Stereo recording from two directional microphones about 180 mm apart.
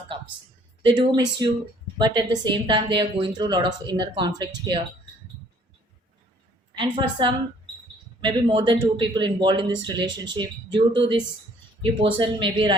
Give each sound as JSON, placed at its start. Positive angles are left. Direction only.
{"t": 0.8, "sound": "a woman's voice", "side_deg": -25}
{"t": 6.7, "sound": "a woman's voice", "side_deg": -25}